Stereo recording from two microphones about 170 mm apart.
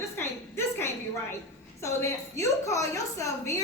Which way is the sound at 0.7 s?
15° left (ahead or behind).